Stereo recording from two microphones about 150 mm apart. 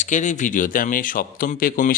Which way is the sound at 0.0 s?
55° left (ahead or behind).